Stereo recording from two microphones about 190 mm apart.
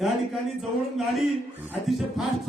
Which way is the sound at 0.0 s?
Centre (ahead or behind).